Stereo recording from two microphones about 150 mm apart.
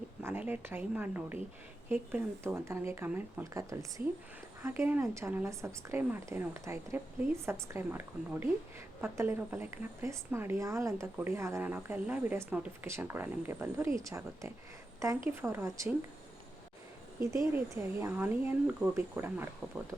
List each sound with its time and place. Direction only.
0.2 s speech: 15° right (ahead or behind)
17.5 s speech: 15° right (ahead or behind)